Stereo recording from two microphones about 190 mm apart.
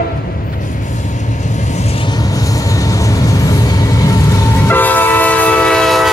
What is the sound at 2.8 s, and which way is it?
Vehicle, 15° left (ahead or behind).